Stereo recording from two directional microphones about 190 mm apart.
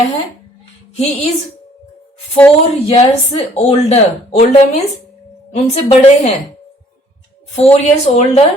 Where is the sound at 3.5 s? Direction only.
35° left (ahead or behind).